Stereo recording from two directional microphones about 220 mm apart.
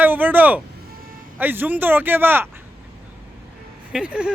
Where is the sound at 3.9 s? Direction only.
5° right (ahead or behind).